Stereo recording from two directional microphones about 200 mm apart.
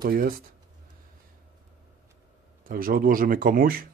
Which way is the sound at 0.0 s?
45° right (ahead or behind).